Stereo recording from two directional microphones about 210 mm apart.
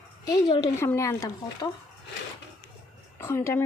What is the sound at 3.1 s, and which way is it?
Speech, 10° left (ahead or behind).